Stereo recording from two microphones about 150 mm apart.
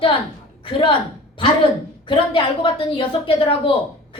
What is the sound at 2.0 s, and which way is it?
A woman's voice, 35° left (ahead or behind).